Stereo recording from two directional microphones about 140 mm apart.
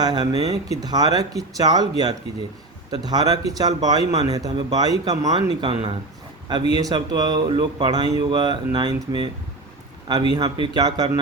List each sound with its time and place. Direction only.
0.0 s a man's voice: 30° right (ahead or behind)
2.9 s a man's voice: 30° right (ahead or behind)
10.3 s a man's voice: 30° right (ahead or behind)